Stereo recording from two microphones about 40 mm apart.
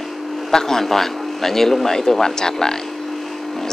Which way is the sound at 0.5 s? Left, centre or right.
Centre.